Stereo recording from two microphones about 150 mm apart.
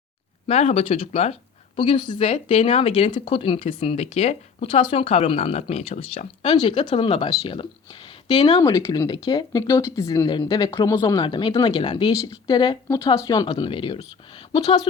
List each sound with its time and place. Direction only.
0.4 s speech: 45° left (ahead or behind)
6.5 s speech: 30° left (ahead or behind)
8.6 s speech: 20° left (ahead or behind)
12.1 s speech: 25° left (ahead or behind)